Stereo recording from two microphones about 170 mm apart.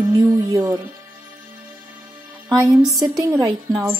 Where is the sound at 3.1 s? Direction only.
20° right (ahead or behind).